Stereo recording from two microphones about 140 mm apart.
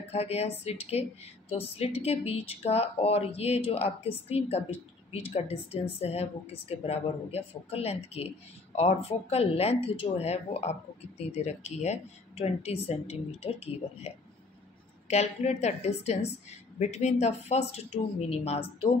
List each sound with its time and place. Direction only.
0.1 s speech: 50° left (ahead or behind)